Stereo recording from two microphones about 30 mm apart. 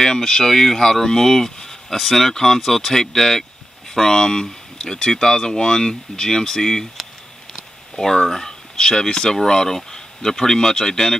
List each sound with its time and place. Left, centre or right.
0.0 s speech: centre
7.9 s speech: centre